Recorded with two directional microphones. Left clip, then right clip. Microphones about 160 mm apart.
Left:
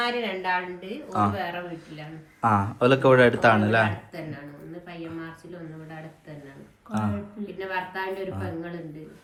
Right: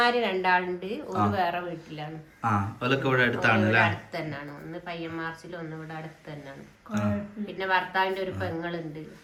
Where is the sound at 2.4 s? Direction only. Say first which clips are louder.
Left 6 dB; centre (ahead or behind).